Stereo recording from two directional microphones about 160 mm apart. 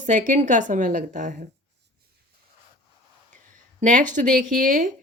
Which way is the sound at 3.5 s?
55° right (ahead or behind).